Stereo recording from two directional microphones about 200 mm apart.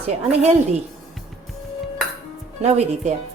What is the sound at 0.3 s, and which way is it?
Dishes, 35° right (ahead or behind).